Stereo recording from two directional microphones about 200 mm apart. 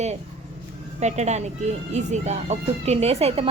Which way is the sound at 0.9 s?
35° right (ahead or behind).